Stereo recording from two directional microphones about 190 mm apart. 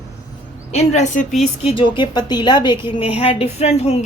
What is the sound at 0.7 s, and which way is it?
A woman's voice, 40° left (ahead or behind).